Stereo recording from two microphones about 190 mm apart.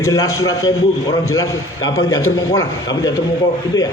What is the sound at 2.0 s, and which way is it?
Speech, 90° left.